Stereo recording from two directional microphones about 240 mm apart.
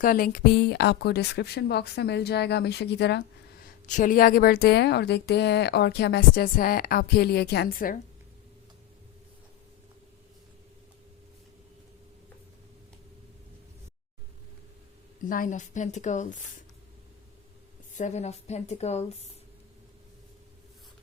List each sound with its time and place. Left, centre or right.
0.0 s a woman's voice: left
3.8 s a woman's voice: left
15.2 s a woman's voice: left
17.9 s a woman's voice: left